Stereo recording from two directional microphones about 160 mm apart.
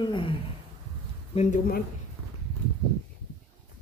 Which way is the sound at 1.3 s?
50° left (ahead or behind).